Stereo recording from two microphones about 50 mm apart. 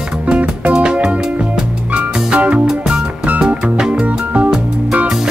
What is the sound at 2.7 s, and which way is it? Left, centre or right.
Music, centre.